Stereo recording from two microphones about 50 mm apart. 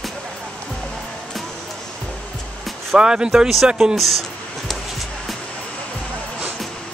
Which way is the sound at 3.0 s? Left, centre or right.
Centre.